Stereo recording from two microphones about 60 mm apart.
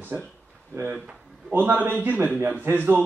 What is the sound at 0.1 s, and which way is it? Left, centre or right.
Speech, right.